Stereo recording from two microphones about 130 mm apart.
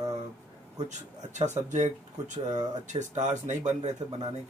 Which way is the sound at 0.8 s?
65° right (ahead or behind).